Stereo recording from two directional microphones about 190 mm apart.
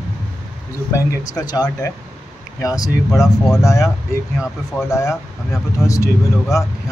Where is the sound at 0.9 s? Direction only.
15° left (ahead or behind).